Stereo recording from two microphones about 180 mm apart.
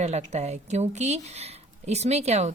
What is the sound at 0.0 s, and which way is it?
A woman's voice, 40° right (ahead or behind).